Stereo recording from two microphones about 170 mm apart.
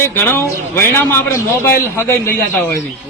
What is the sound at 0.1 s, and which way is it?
Speech, 15° left (ahead or behind).